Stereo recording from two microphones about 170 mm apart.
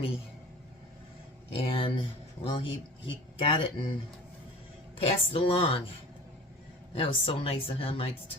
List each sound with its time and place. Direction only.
1.5 s speech: 30° left (ahead or behind)
4.9 s speech: 35° left (ahead or behind)
6.9 s speech: 35° left (ahead or behind)